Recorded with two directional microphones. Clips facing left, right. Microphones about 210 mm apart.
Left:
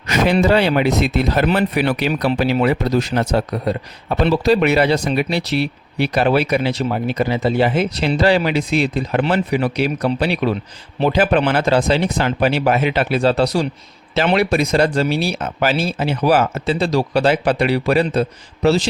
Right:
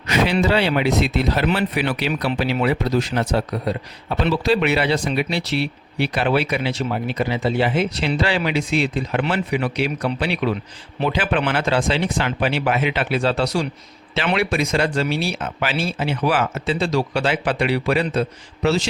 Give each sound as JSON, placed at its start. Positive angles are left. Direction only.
{"t": 0.1, "sound": "speech", "side_deg": 45}